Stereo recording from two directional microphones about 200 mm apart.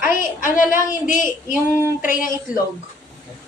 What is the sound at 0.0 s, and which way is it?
Speech, 40° left (ahead or behind).